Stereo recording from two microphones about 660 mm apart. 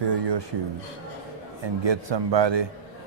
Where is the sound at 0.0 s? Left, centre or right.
Right.